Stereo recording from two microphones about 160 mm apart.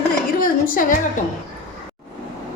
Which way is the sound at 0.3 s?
60° left (ahead or behind).